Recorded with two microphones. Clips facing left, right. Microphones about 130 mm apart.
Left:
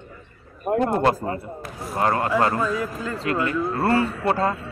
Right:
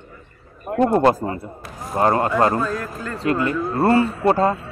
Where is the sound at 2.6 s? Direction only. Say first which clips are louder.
Even; centre (ahead or behind).